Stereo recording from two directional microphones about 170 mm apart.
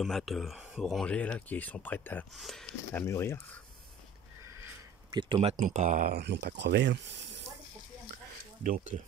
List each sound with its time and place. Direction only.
0.0 s speech: centre (ahead or behind)
2.3 s speech: centre (ahead or behind)
2.9 s speech: 15° left (ahead or behind)
5.1 s speech: 25° right (ahead or behind)
5.5 s speech: 40° right (ahead or behind)
6.1 s speech: 80° right
8.6 s speech: 50° right (ahead or behind)